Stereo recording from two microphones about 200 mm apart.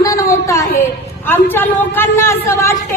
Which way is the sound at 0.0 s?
15° left (ahead or behind).